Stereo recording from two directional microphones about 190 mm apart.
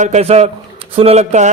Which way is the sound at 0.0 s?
35° right (ahead or behind).